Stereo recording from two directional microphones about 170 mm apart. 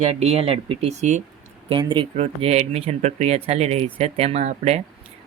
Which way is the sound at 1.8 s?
30° right (ahead or behind).